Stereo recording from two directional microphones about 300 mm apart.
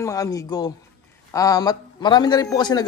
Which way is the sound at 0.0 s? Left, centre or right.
Centre.